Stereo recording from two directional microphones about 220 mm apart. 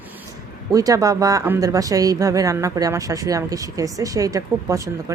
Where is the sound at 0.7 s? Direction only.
15° right (ahead or behind).